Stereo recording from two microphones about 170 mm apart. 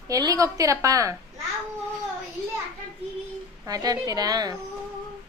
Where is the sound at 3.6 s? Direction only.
20° right (ahead or behind).